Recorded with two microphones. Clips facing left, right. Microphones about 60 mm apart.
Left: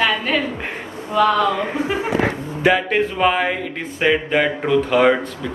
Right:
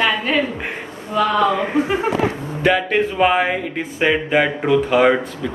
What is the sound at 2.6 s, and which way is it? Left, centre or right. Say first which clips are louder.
Speech: even; centre.